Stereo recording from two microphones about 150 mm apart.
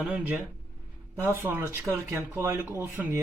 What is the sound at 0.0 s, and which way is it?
Speech, 10° right (ahead or behind).